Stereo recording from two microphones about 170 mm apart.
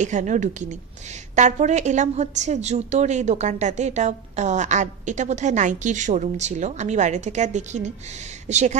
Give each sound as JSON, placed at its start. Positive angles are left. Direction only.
{"t": 0.0, "sound": "a woman's voice", "side_deg": -45}